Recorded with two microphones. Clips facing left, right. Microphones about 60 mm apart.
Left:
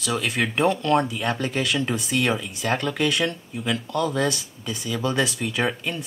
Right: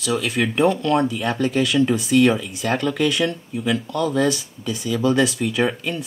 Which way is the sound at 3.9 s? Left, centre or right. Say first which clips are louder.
Right 2 dB; centre.